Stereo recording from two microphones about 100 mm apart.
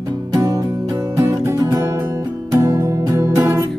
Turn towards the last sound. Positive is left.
turn(degrees=-30)  # may be behind; listen again after turning